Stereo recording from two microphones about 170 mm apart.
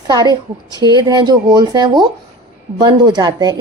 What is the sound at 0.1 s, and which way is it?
A woman's voice, 25° right (ahead or behind).